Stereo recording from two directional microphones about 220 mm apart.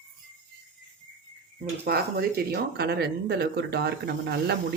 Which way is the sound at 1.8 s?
45° right (ahead or behind).